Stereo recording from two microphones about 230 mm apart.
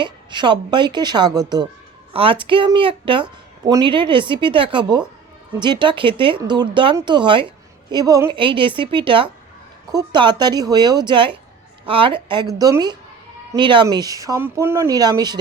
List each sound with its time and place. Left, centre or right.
0.0 s speech: centre